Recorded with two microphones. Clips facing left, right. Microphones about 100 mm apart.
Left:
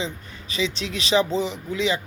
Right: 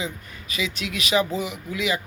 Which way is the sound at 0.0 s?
30° left (ahead or behind).